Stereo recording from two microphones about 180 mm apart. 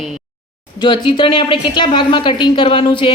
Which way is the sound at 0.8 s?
25° left (ahead or behind).